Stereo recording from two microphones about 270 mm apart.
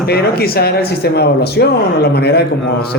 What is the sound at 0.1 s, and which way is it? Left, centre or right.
Speech, left.